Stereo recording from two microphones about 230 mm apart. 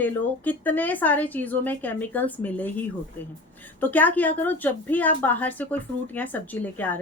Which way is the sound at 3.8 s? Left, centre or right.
Centre.